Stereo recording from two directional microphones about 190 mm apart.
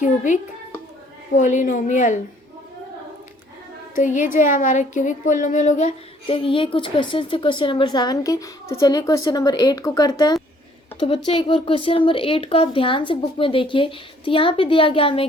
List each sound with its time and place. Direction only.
1.4 s a woman's voice: 40° left (ahead or behind)
3.9 s a woman's voice: 40° left (ahead or behind)
6.2 s a woman's voice: 30° left (ahead or behind)